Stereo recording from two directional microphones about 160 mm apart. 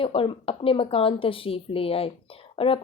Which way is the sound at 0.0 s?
35° left (ahead or behind).